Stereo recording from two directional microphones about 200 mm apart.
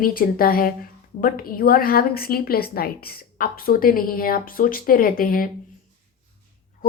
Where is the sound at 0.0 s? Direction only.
45° left (ahead or behind).